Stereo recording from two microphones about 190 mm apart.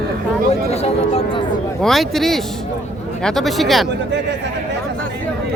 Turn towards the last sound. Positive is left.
turn(degrees=0)  # may be behind; listen again after turning